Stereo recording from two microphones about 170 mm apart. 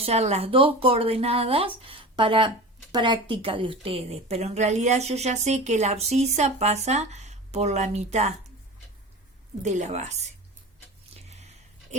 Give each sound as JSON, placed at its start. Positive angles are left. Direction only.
{"t": 0.0, "sound": "a woman's voice", "side_deg": -40}
{"t": 9.6, "sound": "a woman's voice", "side_deg": -45}
{"t": 11.3, "sound": "a sound", "side_deg": -40}